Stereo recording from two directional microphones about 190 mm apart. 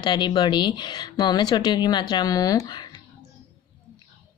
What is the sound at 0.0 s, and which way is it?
Speech, 25° left (ahead or behind).